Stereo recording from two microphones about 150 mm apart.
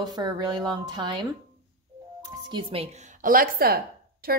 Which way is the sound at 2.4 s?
35° right (ahead or behind).